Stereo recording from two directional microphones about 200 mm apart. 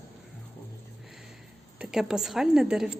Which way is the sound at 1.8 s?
5° right (ahead or behind).